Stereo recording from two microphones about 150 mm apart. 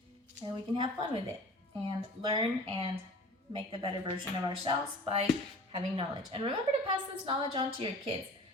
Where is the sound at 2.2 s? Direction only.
35° right (ahead or behind).